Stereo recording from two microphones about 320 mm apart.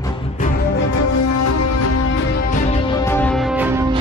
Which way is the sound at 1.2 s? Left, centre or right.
Left.